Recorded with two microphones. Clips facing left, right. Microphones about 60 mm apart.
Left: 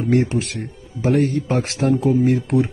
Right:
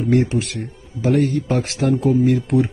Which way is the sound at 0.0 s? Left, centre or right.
Left.